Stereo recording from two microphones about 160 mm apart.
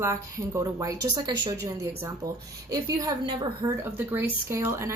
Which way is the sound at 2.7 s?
20° right (ahead or behind).